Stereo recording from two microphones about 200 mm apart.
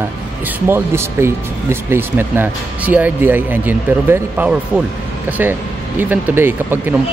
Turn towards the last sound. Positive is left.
turn(degrees=-10)  # may be behind; listen again after turning